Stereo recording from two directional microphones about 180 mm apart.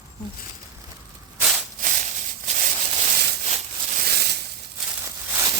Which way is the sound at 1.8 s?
45° right (ahead or behind).